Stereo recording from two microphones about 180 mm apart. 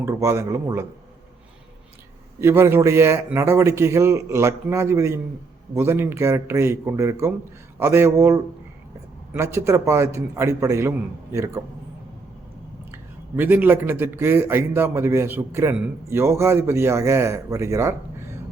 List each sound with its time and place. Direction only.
0.0 s speech: 15° right (ahead or behind)
2.4 s speech: 15° right (ahead or behind)
12.9 s speech: 10° right (ahead or behind)